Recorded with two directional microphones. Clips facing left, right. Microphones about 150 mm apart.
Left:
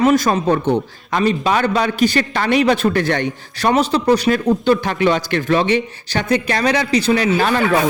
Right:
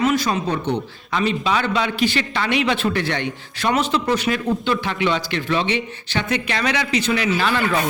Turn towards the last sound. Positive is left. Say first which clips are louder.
# left 4 dB
turn(degrees=45)  # may be behind; listen again after turning